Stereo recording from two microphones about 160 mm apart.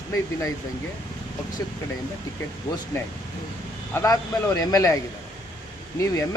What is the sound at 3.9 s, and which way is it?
Speech, 20° left (ahead or behind).